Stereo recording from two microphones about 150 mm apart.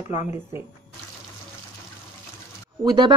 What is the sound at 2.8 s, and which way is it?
Speech, 30° right (ahead or behind).